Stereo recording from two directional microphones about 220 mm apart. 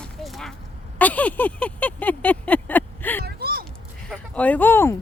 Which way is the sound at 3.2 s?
45° right (ahead or behind).